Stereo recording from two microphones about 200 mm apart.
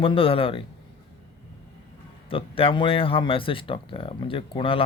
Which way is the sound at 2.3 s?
25° left (ahead or behind).